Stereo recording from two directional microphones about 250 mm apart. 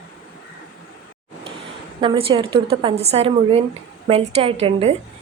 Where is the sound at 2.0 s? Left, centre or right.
Right.